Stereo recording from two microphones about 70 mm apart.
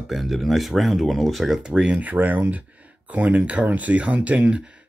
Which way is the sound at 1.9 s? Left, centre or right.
Right.